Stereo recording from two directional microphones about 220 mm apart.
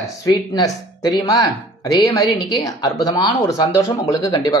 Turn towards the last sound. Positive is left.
turn(degrees=15)  # may be behind; listen again after turning